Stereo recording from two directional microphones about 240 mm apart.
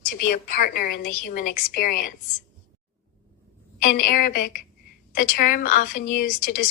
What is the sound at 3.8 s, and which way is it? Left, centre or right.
A woman's voice, left.